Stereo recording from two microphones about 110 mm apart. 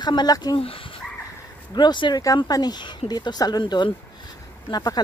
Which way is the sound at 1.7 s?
45° left (ahead or behind).